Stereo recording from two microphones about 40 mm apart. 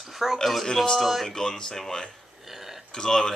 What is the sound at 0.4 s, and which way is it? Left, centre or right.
Speech, centre.